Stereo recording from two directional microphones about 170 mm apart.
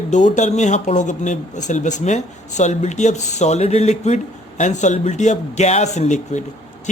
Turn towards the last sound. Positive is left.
turn(degrees=45)  # may be behind; listen again after turning